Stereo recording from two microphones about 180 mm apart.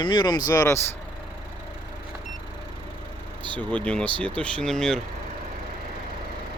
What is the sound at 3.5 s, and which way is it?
Speech, 10° left (ahead or behind).